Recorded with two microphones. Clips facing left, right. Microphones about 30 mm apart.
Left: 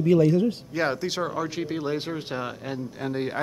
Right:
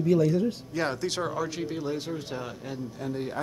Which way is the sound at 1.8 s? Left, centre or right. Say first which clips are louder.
Left 3 dB; left.